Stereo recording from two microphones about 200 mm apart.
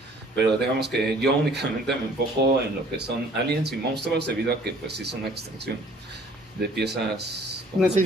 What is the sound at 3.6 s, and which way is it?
Speech, 55° right (ahead or behind).